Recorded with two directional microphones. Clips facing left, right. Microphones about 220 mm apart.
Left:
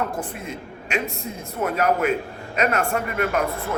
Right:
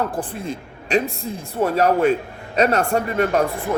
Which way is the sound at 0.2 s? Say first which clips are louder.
Right 4 dB; 35° right (ahead or behind).